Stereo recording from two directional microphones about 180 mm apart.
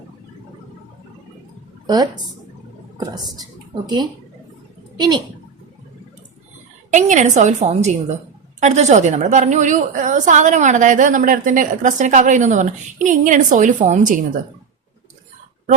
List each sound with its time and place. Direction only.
1.9 s a woman's voice: 20° right (ahead or behind)
3.8 s a woman's voice: 20° right (ahead or behind)
6.9 s a woman's voice: 45° right (ahead or behind)